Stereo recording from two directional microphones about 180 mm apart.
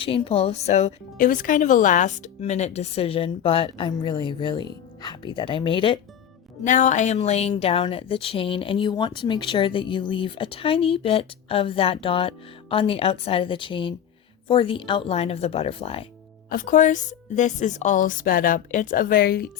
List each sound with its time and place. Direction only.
0.0 s speech: 30° left (ahead or behind)
6.7 s speech: 40° left (ahead or behind)
16.5 s a woman's voice: 50° left (ahead or behind)